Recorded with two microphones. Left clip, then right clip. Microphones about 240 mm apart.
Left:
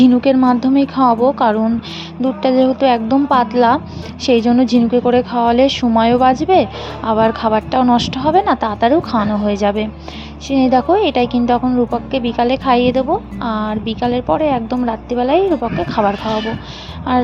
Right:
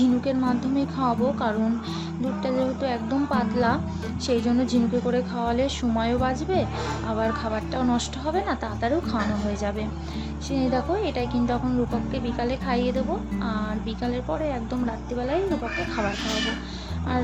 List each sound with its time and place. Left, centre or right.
0.0 s a woman's voice: left
17.1 s a woman's voice: left